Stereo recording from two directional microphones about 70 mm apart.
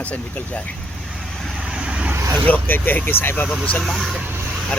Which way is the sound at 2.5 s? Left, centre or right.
Left.